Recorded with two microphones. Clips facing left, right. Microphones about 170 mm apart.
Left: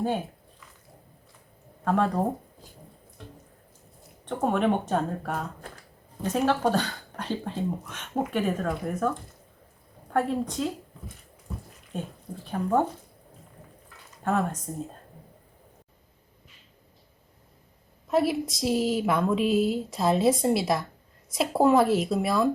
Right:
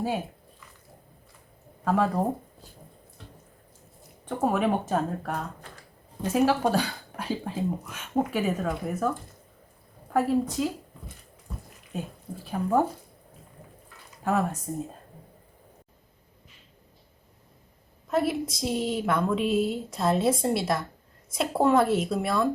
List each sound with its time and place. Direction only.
1.8 s speech: 5° right (ahead or behind)
4.3 s speech: 5° right (ahead or behind)
12.5 s speech: 5° right (ahead or behind)
14.3 s speech: 5° right (ahead or behind)
18.1 s speech: centre (ahead or behind)